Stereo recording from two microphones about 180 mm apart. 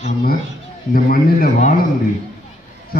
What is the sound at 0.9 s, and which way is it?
Speech, 55° left (ahead or behind).